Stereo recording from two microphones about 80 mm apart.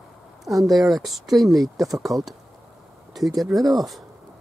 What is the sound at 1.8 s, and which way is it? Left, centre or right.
Speech, right.